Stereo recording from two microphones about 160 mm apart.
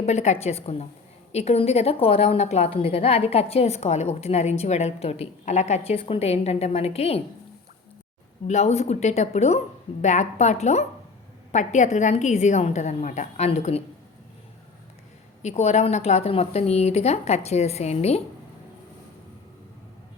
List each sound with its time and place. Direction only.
0.0 s a woman's voice: 45° left (ahead or behind)
8.4 s speech: 45° left (ahead or behind)
15.4 s a woman's voice: 45° left (ahead or behind)